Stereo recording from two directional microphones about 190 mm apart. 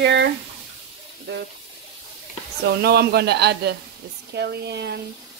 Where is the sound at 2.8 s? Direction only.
55° right (ahead or behind).